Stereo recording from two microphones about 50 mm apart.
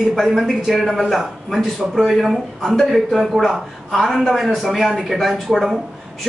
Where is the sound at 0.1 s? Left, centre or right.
Centre.